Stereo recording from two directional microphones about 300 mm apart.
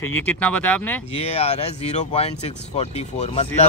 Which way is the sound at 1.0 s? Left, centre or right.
Centre.